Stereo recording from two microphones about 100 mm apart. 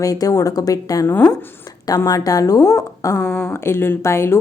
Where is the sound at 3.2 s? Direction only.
15° left (ahead or behind).